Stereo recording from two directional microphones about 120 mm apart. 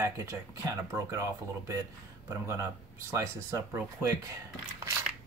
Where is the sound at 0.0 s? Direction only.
25° right (ahead or behind).